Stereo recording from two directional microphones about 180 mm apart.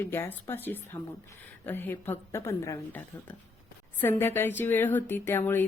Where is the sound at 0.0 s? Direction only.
10° left (ahead or behind).